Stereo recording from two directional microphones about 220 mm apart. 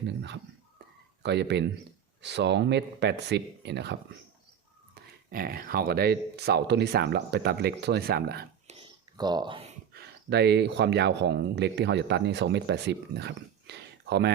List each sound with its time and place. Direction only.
0.0 s speech: 50° right (ahead or behind)
5.3 s speech: 40° right (ahead or behind)
9.1 s speech: 20° right (ahead or behind)
9.9 s speech: 45° right (ahead or behind)